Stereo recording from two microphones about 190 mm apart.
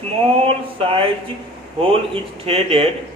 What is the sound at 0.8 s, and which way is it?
A man's voice, 30° right (ahead or behind).